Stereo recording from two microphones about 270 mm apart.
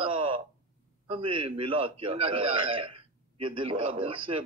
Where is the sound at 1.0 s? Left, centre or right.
Centre.